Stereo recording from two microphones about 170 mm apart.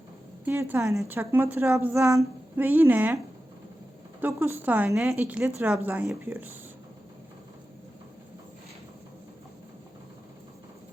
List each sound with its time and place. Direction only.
0.4 s a woman's voice: 15° right (ahead or behind)
4.2 s a woman's voice: 15° right (ahead or behind)